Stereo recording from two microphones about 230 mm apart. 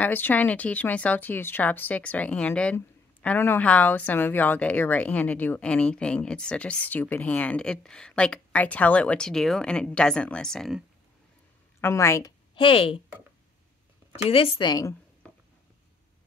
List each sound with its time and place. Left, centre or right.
0.0 s speech: centre
11.8 s a woman's voice: centre
14.1 s speech: left